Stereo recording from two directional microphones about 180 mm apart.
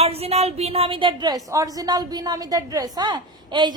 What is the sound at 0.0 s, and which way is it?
A woman's voice, 35° right (ahead or behind).